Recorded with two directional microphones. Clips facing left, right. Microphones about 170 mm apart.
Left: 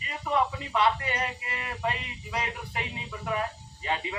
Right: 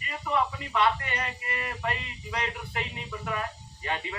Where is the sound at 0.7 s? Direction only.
15° left (ahead or behind).